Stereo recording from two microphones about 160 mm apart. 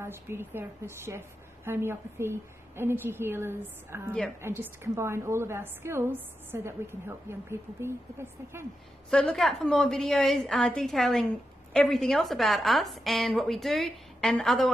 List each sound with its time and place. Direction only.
0.0 s a woman's voice: 15° right (ahead or behind)
9.1 s a woman's voice: 5° left (ahead or behind)